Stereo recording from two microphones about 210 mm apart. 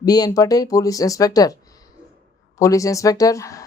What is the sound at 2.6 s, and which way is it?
Speech, 15° left (ahead or behind).